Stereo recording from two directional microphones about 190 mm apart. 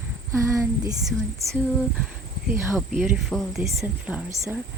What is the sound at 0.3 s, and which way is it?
Speech, 15° right (ahead or behind).